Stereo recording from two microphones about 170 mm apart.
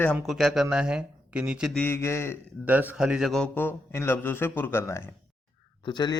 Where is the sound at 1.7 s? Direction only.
15° left (ahead or behind).